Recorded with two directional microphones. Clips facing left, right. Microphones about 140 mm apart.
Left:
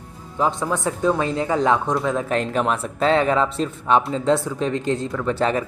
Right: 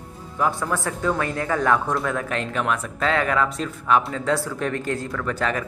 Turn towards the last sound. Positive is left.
turn(degrees=30)  # may be behind; listen again after turning